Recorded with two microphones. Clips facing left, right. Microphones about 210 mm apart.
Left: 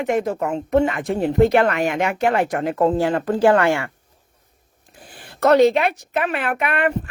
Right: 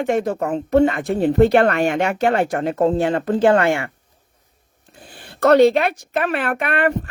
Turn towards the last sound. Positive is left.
turn(degrees=-35)  # may be behind; listen again after turning